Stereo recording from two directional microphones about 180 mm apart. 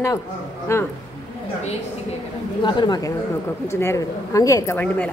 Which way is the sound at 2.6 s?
25° left (ahead or behind).